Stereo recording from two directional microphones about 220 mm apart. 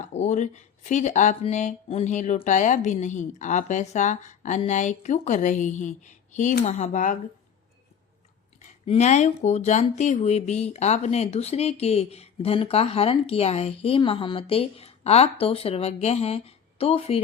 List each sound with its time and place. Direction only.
0.1 s speech: 30° left (ahead or behind)
8.5 s speech: 30° left (ahead or behind)